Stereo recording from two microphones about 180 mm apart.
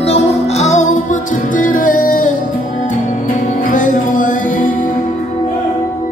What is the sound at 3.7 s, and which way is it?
Music, 45° left (ahead or behind).